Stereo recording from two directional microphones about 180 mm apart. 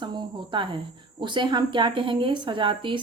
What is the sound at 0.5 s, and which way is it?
A woman's voice, 25° right (ahead or behind).